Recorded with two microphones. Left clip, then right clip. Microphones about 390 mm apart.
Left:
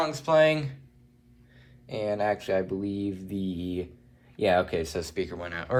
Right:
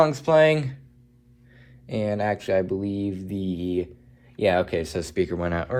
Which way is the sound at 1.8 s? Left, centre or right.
Centre.